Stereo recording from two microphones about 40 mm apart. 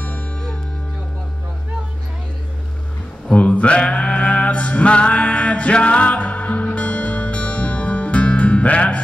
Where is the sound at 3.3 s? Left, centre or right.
Left.